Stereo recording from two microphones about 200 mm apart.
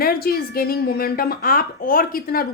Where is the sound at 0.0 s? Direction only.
50° left (ahead or behind).